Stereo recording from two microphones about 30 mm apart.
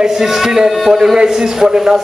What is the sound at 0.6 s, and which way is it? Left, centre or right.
Speech, centre.